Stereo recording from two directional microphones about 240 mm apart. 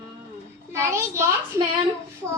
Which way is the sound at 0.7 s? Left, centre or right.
Centre.